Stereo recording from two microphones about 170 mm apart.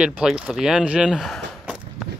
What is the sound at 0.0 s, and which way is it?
Speech, 5° right (ahead or behind).